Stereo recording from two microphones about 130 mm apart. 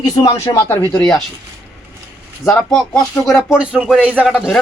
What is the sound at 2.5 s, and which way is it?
Speech, 5° left (ahead or behind).